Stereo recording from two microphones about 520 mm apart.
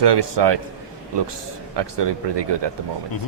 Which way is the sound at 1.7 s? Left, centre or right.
Right.